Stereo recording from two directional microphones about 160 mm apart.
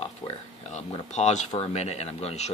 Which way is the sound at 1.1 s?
45° left (ahead or behind).